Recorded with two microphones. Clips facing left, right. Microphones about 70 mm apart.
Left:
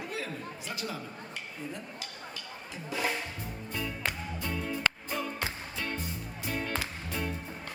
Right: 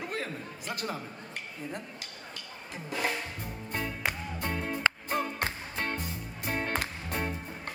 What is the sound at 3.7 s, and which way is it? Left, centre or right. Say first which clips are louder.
Music: right 2 dB; right.